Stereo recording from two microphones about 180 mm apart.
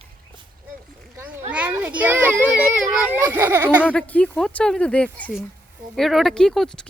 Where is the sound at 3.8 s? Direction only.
10° left (ahead or behind).